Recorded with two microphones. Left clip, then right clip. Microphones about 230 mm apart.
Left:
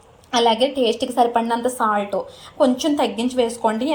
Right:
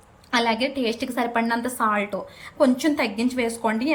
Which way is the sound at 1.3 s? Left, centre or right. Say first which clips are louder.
Left 4 dB; right.